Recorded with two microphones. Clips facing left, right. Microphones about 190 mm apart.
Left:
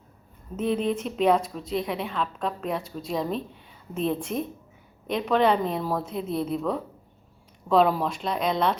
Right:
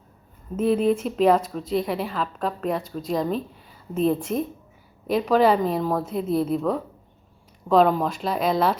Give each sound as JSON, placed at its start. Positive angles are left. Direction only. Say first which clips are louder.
{"t": 0.5, "sound": "speech", "louder": "right 5 dB", "side_deg": -5}